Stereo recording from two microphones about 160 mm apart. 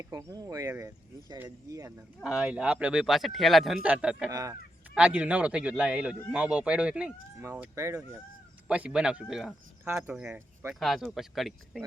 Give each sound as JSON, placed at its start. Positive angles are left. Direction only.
{"t": 0.0, "sound": "speech", "side_deg": -20}
{"t": 2.2, "sound": "a man's voice", "side_deg": -5}
{"t": 4.3, "sound": "speech", "side_deg": -20}
{"t": 4.9, "sound": "a man's voice", "side_deg": -5}
{"t": 9.8, "sound": "speech", "side_deg": -15}
{"t": 10.8, "sound": "speech", "side_deg": 0}